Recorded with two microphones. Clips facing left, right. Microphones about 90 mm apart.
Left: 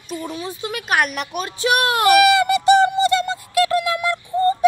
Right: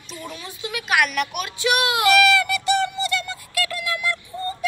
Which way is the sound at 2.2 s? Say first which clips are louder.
Left 4 dB; 20° left (ahead or behind).